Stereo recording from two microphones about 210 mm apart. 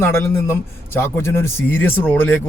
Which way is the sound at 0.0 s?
10° left (ahead or behind).